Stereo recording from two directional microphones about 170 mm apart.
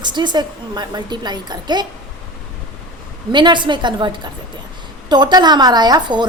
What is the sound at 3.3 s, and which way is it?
Speech, 25° right (ahead or behind).